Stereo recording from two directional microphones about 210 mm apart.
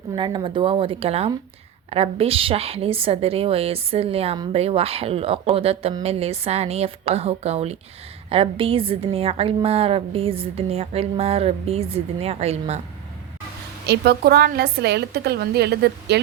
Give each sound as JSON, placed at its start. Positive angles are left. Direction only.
{"t": 0.2, "sound": "a woman's voice", "side_deg": -25}
{"t": 13.8, "sound": "a woman's voice", "side_deg": -50}